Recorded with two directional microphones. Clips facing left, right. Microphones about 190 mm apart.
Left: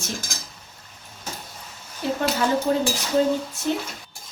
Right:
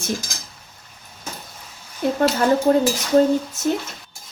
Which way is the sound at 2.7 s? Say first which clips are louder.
Right 7 dB; 55° right (ahead or behind).